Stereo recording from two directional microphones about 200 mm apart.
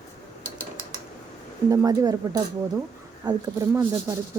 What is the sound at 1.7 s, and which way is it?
Speech, 20° right (ahead or behind).